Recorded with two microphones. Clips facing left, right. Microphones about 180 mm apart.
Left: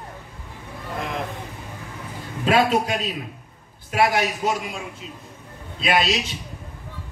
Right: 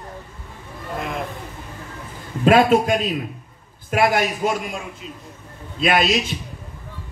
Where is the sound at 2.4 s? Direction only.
50° right (ahead or behind).